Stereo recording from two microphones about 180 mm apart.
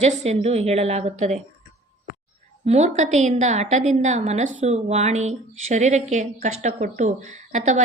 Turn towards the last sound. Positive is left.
turn(degrees=-40)  # may be behind; listen again after turning